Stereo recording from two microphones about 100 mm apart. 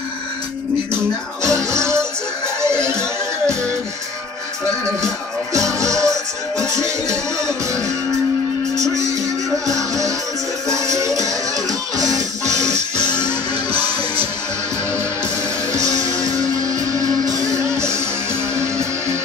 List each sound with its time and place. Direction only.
1.4 s music: 30° right (ahead or behind)
2.7 s music: 10° left (ahead or behind)
5.5 s music: 35° right (ahead or behind)
8.7 s music: 30° right (ahead or behind)
13.7 s music: 20° right (ahead or behind)
15.7 s music: 35° right (ahead or behind)